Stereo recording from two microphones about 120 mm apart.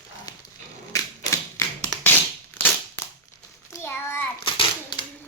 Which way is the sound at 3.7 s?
20° left (ahead or behind).